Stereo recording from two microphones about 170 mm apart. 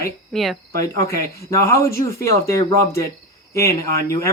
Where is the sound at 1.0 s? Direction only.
15° left (ahead or behind).